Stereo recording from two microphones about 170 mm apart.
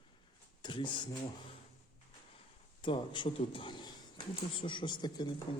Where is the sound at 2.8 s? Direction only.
30° left (ahead or behind).